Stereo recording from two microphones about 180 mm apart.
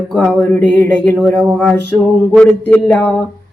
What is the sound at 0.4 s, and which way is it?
A man's voice, 10° left (ahead or behind).